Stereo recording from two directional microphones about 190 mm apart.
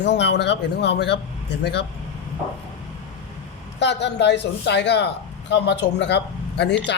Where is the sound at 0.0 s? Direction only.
65° left (ahead or behind).